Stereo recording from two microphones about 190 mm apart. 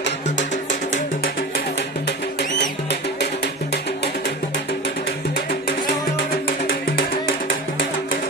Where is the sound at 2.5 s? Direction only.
60° left (ahead or behind).